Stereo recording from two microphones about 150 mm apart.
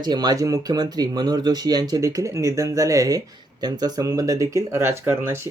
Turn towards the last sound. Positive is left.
turn(degrees=-15)  # may be behind; listen again after turning